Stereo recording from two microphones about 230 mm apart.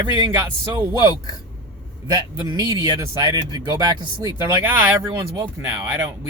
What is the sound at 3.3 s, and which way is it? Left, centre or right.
Speech, centre.